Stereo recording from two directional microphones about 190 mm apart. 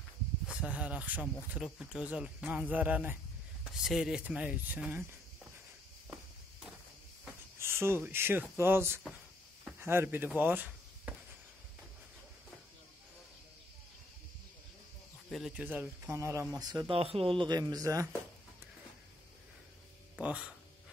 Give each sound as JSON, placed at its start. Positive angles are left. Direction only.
{"t": 0.5, "sound": "speech", "side_deg": -5}
{"t": 7.5, "sound": "speech", "side_deg": -15}
{"t": 15.2, "sound": "speech", "side_deg": 0}
{"t": 20.2, "sound": "speech", "side_deg": -5}